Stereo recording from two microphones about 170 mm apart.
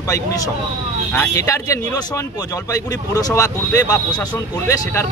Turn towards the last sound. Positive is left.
turn(degrees=15)  # may be behind; listen again after turning